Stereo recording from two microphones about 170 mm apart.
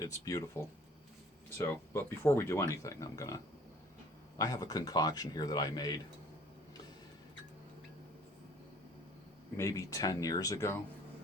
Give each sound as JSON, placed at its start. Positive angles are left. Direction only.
{"t": 0.0, "sound": "speech", "side_deg": 20}
{"t": 1.5, "sound": "speech", "side_deg": 15}
{"t": 9.6, "sound": "speech", "side_deg": 20}